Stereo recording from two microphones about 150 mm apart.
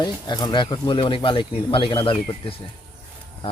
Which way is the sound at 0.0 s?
30° left (ahead or behind).